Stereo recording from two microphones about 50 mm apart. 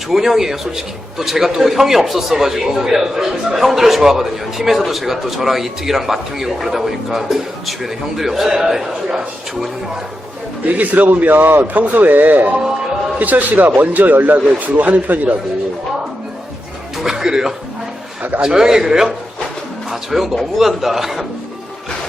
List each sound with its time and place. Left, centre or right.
0.1 s a man's voice: centre
10.7 s a man's voice: right
17.0 s a man's voice: centre
18.2 s a man's voice: right
18.4 s a man's voice: centre